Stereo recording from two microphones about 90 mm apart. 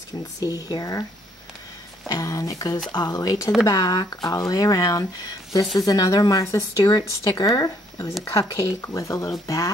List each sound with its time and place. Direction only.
0.4 s speech: 45° left (ahead or behind)
2.0 s speech: 40° left (ahead or behind)
8.8 s speech: 35° left (ahead or behind)